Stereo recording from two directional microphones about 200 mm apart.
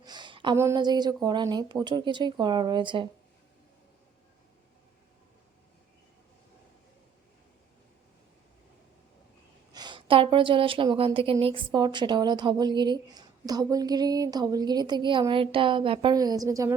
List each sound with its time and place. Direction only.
0.0 s a sound: 20° right (ahead or behind)
0.5 s a woman's voice: 15° right (ahead or behind)
9.7 s a woman's voice: 20° right (ahead or behind)